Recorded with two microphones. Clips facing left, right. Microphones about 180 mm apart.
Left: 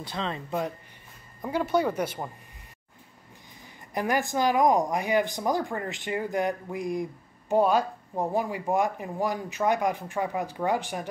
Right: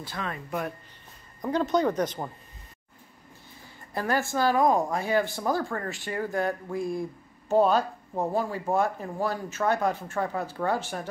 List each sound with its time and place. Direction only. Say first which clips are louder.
0.0 s speech: left 2 dB; 20° left (ahead or behind)
1.4 s a woman's voice: right 1 dB; 10° left (ahead or behind)
3.6 s a woman's voice: left 1 dB; 15° left (ahead or behind)